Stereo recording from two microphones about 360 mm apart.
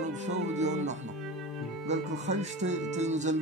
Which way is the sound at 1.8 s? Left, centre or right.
Centre.